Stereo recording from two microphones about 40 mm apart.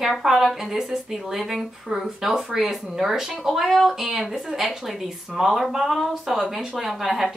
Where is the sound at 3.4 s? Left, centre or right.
Centre.